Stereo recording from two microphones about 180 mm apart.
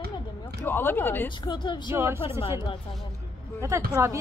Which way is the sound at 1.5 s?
25° left (ahead or behind).